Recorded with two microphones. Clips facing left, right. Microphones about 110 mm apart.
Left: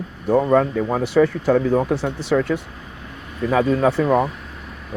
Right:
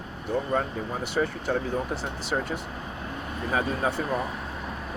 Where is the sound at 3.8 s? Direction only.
90° left.